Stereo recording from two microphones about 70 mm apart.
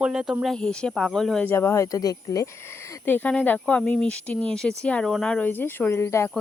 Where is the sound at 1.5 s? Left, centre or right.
Left.